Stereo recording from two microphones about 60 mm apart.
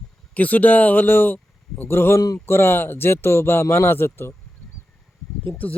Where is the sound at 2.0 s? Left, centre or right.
Left.